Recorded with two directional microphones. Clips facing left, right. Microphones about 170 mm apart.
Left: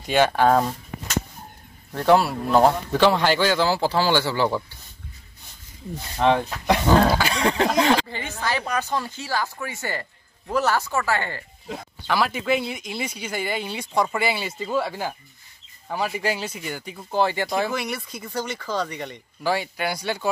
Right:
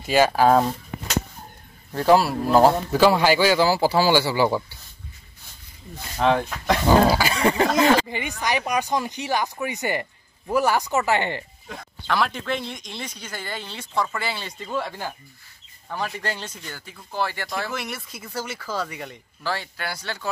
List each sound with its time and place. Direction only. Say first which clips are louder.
0.0 s speech: right 1 dB; 5° right (ahead or behind)
1.9 s speech: right 1 dB; centre (ahead or behind)
6.1 s speech: left 1 dB; centre (ahead or behind)
8.1 s speech: right 2 dB; 15° right (ahead or behind)
12.1 s speech: left 2 dB; 5° left (ahead or behind)
17.7 s speech: left 4 dB; centre (ahead or behind)
19.4 s speech: left 5 dB; 15° left (ahead or behind)